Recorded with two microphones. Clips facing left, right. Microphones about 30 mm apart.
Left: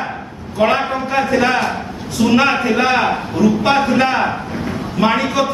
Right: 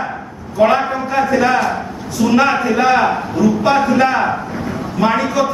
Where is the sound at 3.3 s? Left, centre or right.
Left.